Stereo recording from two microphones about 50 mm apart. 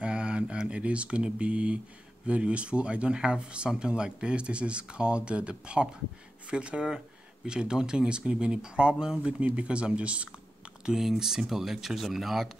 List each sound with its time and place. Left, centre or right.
0.0 s speech: centre
10.9 s speech: centre